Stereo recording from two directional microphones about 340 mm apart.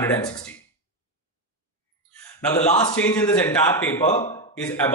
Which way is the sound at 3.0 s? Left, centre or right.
Centre.